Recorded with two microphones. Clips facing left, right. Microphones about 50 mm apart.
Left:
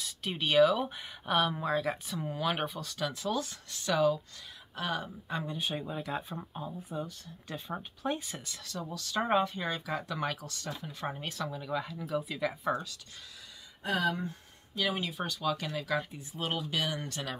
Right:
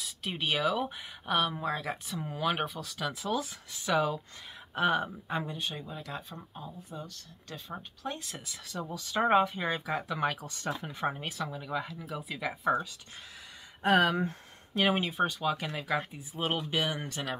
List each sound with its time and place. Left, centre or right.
0.0 s speech: centre
4.7 s speech: right
5.6 s speech: centre
8.6 s speech: centre
10.6 s speech: right
10.9 s speech: centre
11.2 s speech: centre
13.8 s speech: right
14.8 s speech: right; by 16.0 s centre
16.3 s speech: right